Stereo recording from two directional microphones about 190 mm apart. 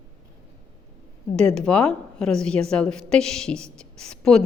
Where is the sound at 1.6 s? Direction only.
5° left (ahead or behind).